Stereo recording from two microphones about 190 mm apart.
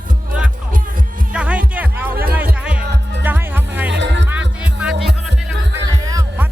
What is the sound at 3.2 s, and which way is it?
Music, 10° right (ahead or behind).